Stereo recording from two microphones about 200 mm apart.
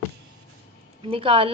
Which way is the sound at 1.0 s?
25° right (ahead or behind).